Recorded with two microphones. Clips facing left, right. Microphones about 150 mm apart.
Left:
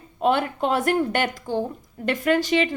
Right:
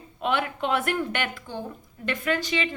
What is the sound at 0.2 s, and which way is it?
A woman's voice, 40° left (ahead or behind).